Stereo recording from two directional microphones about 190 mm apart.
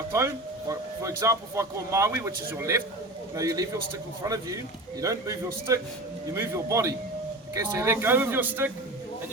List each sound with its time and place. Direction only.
0.1 s speech: 15° right (ahead or behind)